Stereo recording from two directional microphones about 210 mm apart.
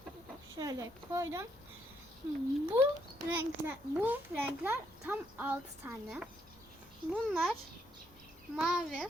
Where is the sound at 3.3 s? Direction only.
10° right (ahead or behind).